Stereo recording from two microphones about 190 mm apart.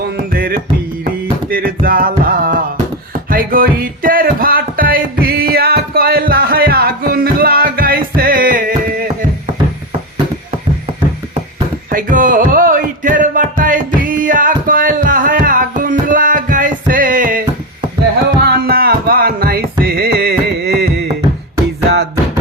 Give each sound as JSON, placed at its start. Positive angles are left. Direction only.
{"t": 0.3, "sound": "music", "side_deg": -50}
{"t": 11.9, "sound": "a sound", "side_deg": -45}
{"t": 18.4, "sound": "music", "side_deg": -50}